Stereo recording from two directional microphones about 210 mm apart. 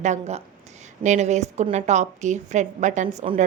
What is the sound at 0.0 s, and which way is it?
A woman's voice, 35° right (ahead or behind).